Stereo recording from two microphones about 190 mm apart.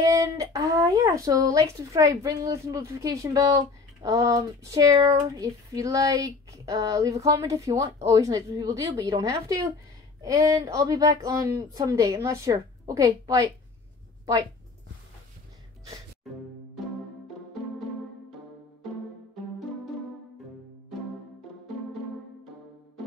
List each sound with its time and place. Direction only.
0.0 s speech: 15° right (ahead or behind)